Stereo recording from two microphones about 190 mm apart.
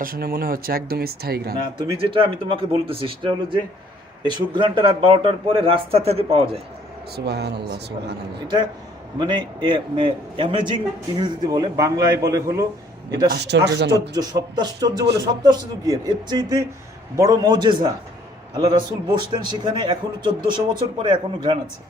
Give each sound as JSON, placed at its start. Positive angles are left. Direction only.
{"t": 0.0, "sound": "speech", "side_deg": -50}
{"t": 2.0, "sound": "a man's voice", "side_deg": -25}
{"t": 7.3, "sound": "speech", "side_deg": -60}
{"t": 9.1, "sound": "a man's voice", "side_deg": -25}
{"t": 13.3, "sound": "speech", "side_deg": -60}
{"t": 14.1, "sound": "a man's voice", "side_deg": -20}